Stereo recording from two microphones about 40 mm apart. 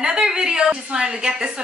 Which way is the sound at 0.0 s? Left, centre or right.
Centre.